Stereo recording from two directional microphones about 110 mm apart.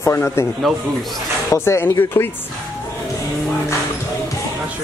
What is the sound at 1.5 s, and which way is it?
Speech, 25° left (ahead or behind).